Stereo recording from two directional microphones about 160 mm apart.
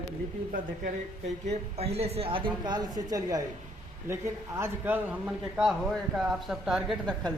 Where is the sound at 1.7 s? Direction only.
40° right (ahead or behind); by 7.2 s centre (ahead or behind).